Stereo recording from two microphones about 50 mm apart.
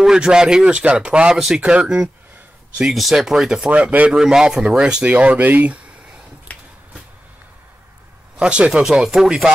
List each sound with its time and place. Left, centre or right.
0.0 s a man's voice: centre
0.7 s speech: right
1.3 s speech: centre
1.6 s speech: right
2.9 s speech: centre
3.7 s speech: right
4.1 s speech: centre; by 5.8 s right
8.4 s speech: centre